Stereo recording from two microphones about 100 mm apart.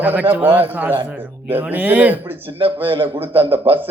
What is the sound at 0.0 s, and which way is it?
Speech, 15° right (ahead or behind).